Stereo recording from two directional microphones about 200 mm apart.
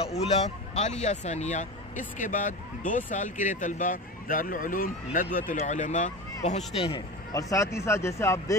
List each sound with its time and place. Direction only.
0.0 s speech: 30° left (ahead or behind)
7.3 s speech: 15° left (ahead or behind)